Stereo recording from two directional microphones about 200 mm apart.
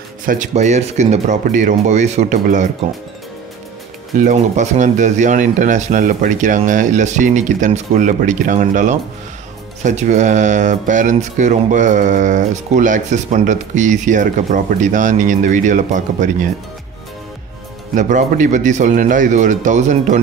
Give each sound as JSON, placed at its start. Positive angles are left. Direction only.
{"t": 0.3, "sound": "speech", "side_deg": -35}
{"t": 4.2, "sound": "speech", "side_deg": -35}
{"t": 17.9, "sound": "speech", "side_deg": -40}